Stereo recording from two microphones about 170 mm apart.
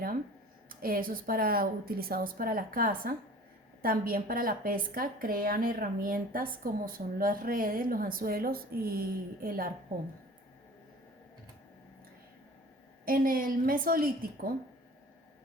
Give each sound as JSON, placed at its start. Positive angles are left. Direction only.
{"t": 0.7, "sound": "a woman's voice", "side_deg": -60}
{"t": 13.1, "sound": "a woman's voice", "side_deg": -55}